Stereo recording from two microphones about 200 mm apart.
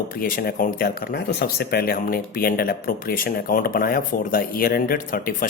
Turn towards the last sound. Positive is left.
turn(degrees=45)  # may be behind; listen again after turning